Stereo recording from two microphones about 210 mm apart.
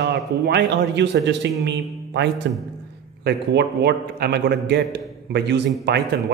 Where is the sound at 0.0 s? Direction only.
55° right (ahead or behind).